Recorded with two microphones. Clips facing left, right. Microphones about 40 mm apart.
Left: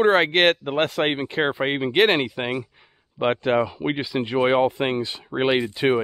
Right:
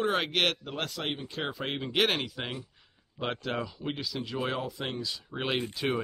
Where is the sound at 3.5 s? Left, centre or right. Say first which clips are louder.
Left 12 dB; left.